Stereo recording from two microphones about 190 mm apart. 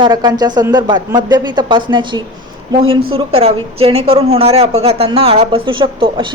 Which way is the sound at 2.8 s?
90° right.